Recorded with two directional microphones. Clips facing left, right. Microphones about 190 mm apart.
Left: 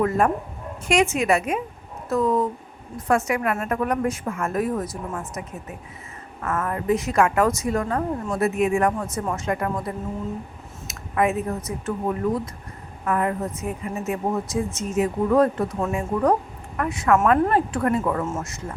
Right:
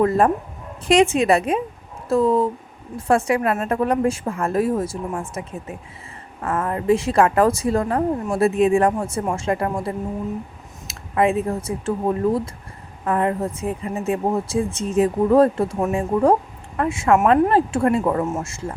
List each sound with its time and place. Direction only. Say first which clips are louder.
0.9 s a woman's voice: right 4 dB; 30° right (ahead or behind)
18.3 s speech: right 3 dB; 15° right (ahead or behind)